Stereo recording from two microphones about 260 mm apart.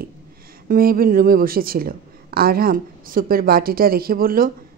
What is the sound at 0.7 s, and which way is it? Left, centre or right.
Speech, right.